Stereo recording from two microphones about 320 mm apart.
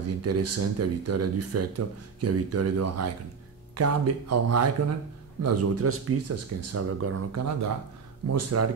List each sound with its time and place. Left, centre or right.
0.2 s speech: right